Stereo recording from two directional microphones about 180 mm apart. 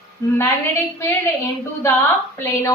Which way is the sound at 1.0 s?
15° left (ahead or behind).